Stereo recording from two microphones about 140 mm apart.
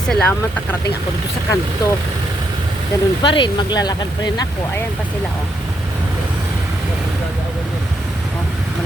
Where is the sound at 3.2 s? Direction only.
35° left (ahead or behind).